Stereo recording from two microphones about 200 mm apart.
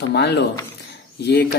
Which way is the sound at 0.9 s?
55° left (ahead or behind).